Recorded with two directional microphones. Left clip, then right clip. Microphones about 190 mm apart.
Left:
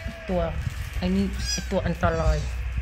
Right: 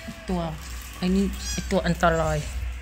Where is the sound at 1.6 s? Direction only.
15° right (ahead or behind).